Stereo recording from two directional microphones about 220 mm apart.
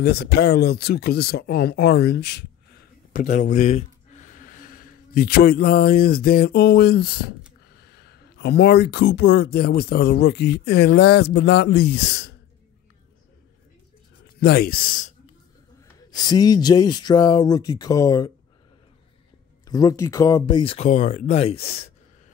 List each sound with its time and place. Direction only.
0.0 s speech: 45° left (ahead or behind)
3.1 s speech: 35° left (ahead or behind); by 12.4 s 50° left (ahead or behind)
14.2 s speech: 45° left (ahead or behind)
16.3 s speech: 15° left (ahead or behind)
19.7 s speech: 15° left (ahead or behind)